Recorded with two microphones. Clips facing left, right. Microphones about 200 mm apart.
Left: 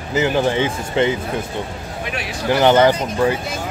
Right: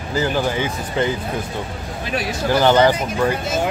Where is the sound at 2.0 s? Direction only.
40° right (ahead or behind).